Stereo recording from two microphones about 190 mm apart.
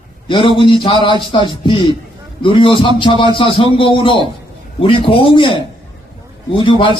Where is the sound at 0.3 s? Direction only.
25° left (ahead or behind).